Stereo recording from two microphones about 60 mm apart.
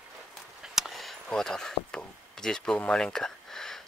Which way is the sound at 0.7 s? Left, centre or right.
Centre.